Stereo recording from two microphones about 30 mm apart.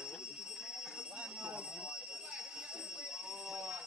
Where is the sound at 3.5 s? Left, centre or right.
Right.